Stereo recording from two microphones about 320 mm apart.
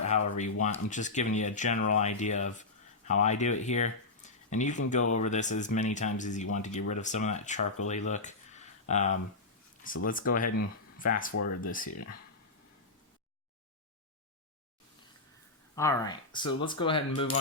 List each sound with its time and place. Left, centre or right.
0.3 s speech: left
7.9 s a sound: left
9.8 s speech: left
15.7 s speech: centre